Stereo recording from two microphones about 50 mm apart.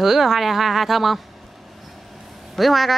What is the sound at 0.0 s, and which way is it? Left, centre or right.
Speech, centre.